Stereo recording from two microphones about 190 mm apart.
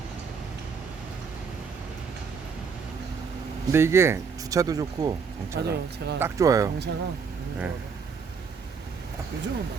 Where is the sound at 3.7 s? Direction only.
15° right (ahead or behind).